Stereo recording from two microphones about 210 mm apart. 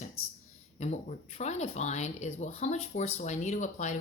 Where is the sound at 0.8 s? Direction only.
35° left (ahead or behind).